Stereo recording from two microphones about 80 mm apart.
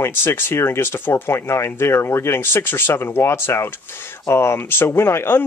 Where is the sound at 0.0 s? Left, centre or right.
Left.